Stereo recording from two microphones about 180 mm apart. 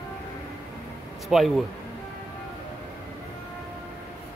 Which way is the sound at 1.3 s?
Centre (ahead or behind).